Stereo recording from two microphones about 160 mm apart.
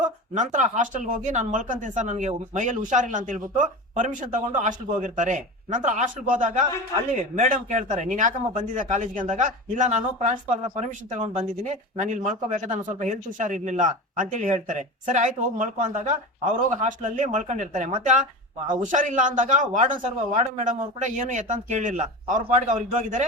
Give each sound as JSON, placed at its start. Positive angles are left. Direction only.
{"t": 0.3, "sound": "speech", "side_deg": -50}